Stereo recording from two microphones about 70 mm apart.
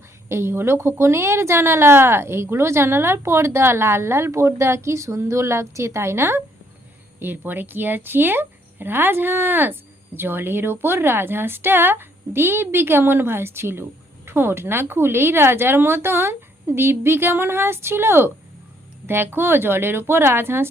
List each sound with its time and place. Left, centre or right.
0.3 s a woman's voice: right